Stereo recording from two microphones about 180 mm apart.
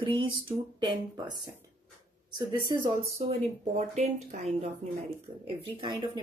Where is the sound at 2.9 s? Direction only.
35° right (ahead or behind).